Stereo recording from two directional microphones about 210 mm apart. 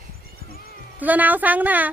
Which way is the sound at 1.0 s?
10° right (ahead or behind).